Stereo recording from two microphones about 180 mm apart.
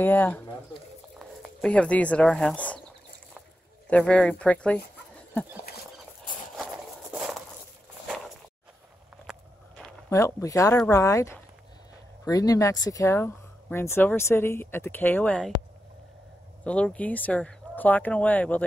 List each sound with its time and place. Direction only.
0.0 s speech: 10° left (ahead or behind)
1.4 s speech: 5° left (ahead or behind)
3.9 s speech: 5° left (ahead or behind)
6.5 s a sound: centre (ahead or behind)
9.2 s walk: centre (ahead or behind)
10.0 s speech: 15° left (ahead or behind)
16.6 s speech: 5° left (ahead or behind)